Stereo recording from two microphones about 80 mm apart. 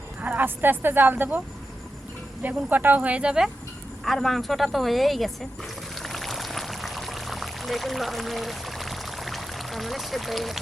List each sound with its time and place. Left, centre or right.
0.2 s speech: right
2.4 s speech: right
4.0 s speech: centre
5.9 s pour: centre